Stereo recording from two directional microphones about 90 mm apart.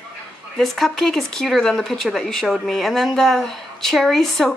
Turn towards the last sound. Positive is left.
turn(degrees=5)  # may be behind; listen again after turning